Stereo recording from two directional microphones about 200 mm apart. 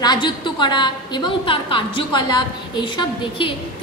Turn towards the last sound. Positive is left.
turn(degrees=20)  # may be behind; listen again after turning